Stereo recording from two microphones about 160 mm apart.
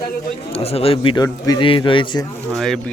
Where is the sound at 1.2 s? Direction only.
20° left (ahead or behind).